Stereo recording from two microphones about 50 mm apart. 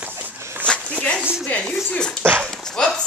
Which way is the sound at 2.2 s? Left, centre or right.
Right.